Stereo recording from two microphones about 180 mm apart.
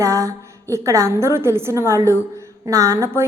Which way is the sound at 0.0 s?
15° right (ahead or behind).